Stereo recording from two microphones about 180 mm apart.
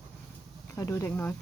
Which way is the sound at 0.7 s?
15° left (ahead or behind).